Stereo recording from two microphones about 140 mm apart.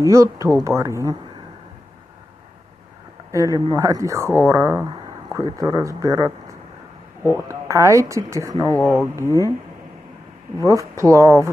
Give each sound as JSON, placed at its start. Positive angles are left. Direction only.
{"t": 0.0, "sound": "speech", "side_deg": -20}
{"t": 3.3, "sound": "speech", "side_deg": -25}
{"t": 7.4, "sound": "speech", "side_deg": -20}
{"t": 8.5, "sound": "speech", "side_deg": 20}
{"t": 9.1, "sound": "speech", "side_deg": -20}
{"t": 10.6, "sound": "speech", "side_deg": -20}